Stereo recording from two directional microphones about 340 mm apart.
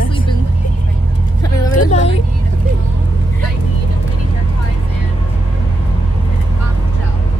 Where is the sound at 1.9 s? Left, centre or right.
Centre.